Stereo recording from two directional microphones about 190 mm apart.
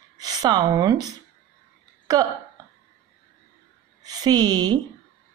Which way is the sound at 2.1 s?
20° right (ahead or behind).